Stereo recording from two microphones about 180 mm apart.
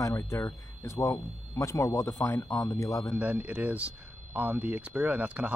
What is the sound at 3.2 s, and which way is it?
Speech, 10° right (ahead or behind).